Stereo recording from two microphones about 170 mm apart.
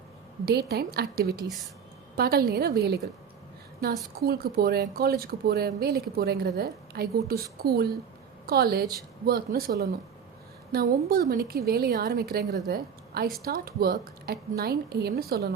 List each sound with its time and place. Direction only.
0.4 s a woman's voice: 70° right (ahead or behind)
4.2 s speech: 65° right (ahead or behind)
11.9 s a woman's voice: 55° right (ahead or behind)